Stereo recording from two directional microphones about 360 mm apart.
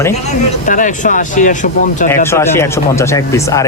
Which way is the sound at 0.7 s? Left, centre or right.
Left.